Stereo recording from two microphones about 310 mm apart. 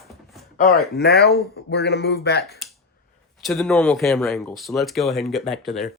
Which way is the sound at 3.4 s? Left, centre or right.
Centre.